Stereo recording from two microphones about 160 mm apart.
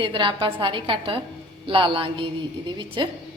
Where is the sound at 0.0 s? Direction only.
30° right (ahead or behind).